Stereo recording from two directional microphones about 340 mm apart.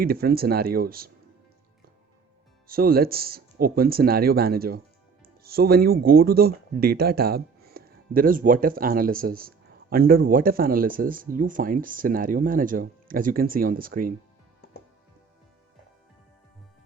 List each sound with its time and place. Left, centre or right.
0.0 s speech: right
2.6 s speech: right